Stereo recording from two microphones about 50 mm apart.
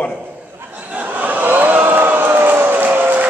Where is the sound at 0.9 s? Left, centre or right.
Right.